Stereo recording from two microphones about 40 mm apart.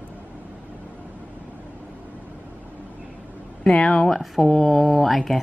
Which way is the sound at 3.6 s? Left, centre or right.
Centre.